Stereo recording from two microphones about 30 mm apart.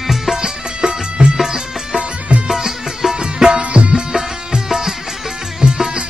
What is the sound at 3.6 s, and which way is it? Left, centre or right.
Music, right.